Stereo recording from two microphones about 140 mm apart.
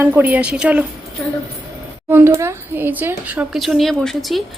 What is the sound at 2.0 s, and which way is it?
Speech, 15° right (ahead or behind).